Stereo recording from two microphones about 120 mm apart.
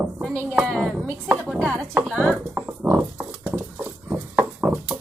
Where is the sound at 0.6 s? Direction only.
Centre (ahead or behind).